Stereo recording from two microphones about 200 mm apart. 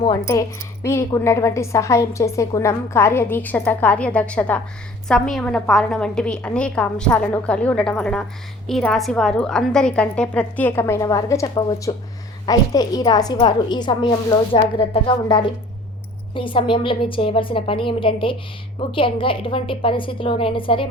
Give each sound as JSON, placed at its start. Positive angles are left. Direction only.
{"t": 0.0, "sound": "a woman's voice", "side_deg": 20}